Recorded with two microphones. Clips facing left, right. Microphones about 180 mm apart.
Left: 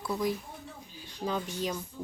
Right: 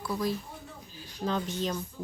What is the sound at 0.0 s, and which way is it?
Speech, 20° left (ahead or behind).